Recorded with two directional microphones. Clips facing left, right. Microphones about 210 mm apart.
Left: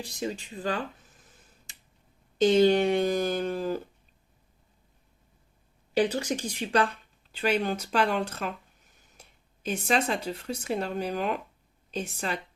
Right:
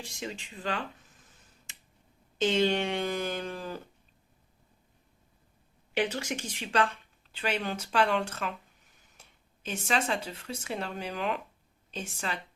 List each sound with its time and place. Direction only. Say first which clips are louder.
0.0 s speech: left 6 dB; 35° left (ahead or behind)
2.4 s speech: left 6 dB; 35° left (ahead or behind)
5.9 s speech: left 5 dB; 35° left (ahead or behind)
9.6 s speech: left 4 dB; 40° left (ahead or behind)